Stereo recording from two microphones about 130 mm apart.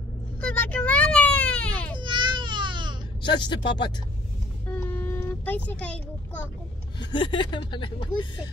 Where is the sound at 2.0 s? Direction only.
35° right (ahead or behind).